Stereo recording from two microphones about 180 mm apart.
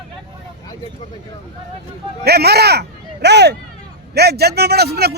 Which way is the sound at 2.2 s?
60° right (ahead or behind).